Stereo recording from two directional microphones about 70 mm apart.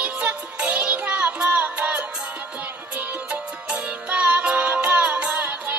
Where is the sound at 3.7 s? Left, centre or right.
Centre.